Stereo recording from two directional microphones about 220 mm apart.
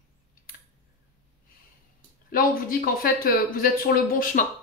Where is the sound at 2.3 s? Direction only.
40° left (ahead or behind).